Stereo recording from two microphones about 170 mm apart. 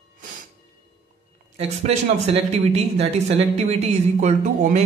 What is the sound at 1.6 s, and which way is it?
Speech, 40° right (ahead or behind).